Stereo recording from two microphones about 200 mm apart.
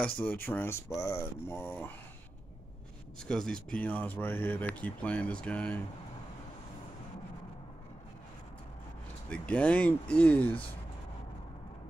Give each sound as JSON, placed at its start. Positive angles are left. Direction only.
{"t": 0.0, "sound": "speech", "side_deg": 10}
{"t": 3.3, "sound": "speech", "side_deg": 5}
{"t": 9.3, "sound": "speech", "side_deg": 5}